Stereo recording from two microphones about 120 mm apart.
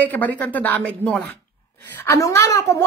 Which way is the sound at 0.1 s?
15° left (ahead or behind).